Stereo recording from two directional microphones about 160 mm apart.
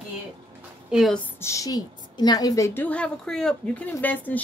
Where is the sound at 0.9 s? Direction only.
5° right (ahead or behind).